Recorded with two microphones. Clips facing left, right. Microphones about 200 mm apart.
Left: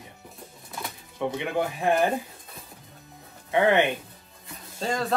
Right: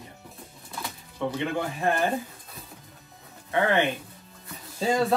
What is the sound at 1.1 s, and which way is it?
Speech, 15° left (ahead or behind).